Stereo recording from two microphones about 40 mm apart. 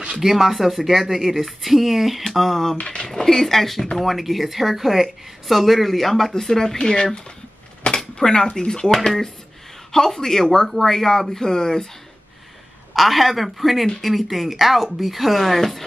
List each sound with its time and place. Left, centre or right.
0.2 s speech: centre
2.8 s speech: left
3.1 s speech: centre
8.1 s speech: centre
12.9 s speech: centre